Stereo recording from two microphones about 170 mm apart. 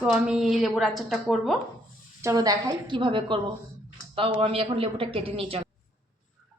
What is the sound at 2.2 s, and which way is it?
A woman's voice, 20° right (ahead or behind).